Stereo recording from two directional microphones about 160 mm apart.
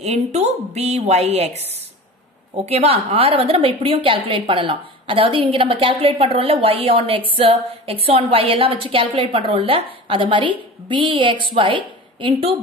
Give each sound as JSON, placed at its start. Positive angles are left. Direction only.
{"t": 0.0, "sound": "a woman's voice", "side_deg": -45}